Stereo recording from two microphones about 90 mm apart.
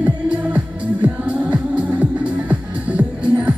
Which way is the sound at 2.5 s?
15° right (ahead or behind).